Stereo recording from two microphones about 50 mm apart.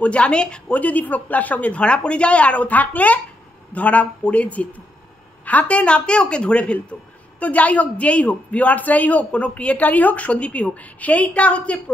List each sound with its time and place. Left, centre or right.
0.0 s a woman's voice: left